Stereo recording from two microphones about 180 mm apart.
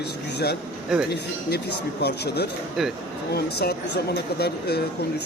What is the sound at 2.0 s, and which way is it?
Speech, 65° left (ahead or behind).